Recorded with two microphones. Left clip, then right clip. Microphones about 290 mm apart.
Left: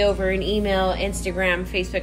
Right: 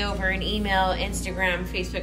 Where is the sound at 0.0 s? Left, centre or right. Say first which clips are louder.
Left 6 dB; right.